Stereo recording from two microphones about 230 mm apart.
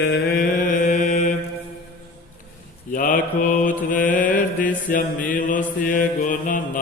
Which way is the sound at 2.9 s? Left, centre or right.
Left.